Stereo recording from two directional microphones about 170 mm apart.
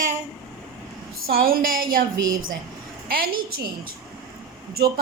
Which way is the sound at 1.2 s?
60° right (ahead or behind).